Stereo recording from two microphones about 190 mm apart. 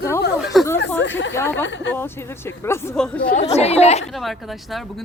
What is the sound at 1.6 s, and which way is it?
Speech, 70° left (ahead or behind).